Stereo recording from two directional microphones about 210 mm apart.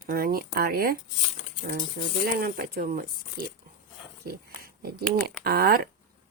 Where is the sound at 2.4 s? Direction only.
45° right (ahead or behind).